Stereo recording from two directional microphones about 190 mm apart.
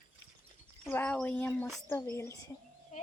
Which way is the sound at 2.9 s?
40° left (ahead or behind).